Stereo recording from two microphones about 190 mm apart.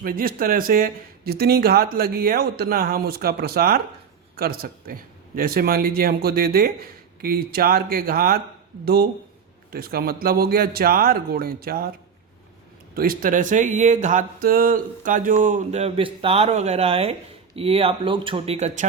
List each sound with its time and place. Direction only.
0.0 s speech: 50° right (ahead or behind)
12.9 s speech: 50° right (ahead or behind)